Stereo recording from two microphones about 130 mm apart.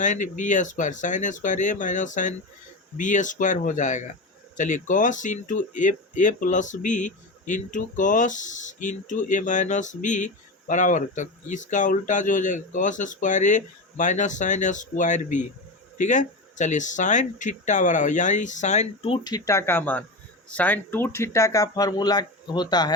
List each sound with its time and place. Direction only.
0.0 s speech: 75° left (ahead or behind)
19.1 s speech: 30° left (ahead or behind)